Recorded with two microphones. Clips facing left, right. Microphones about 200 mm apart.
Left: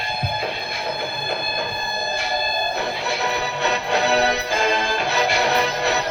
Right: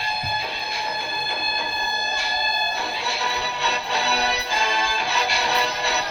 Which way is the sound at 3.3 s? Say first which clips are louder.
Left 6 dB; 55° left (ahead or behind).